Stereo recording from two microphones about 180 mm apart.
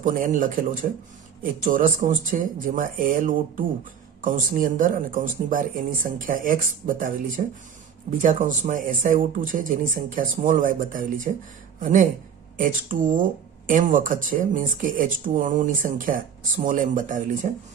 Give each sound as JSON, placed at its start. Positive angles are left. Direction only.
{"t": 0.0, "sound": "speech", "side_deg": -45}